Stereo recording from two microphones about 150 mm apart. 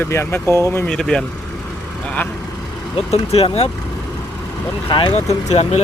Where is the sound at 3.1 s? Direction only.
45° left (ahead or behind).